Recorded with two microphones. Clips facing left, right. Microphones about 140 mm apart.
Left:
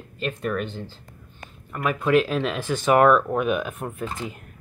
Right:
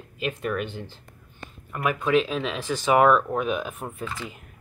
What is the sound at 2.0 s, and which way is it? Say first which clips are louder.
Speech: left 3 dB; centre (ahead or behind).